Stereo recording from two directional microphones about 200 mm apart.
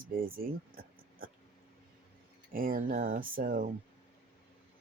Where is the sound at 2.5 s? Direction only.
45° right (ahead or behind).